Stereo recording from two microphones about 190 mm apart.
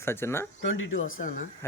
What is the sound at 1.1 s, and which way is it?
Speech, 45° left (ahead or behind).